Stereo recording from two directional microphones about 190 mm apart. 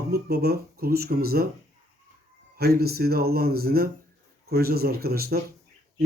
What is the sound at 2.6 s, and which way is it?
Speech, 55° right (ahead or behind).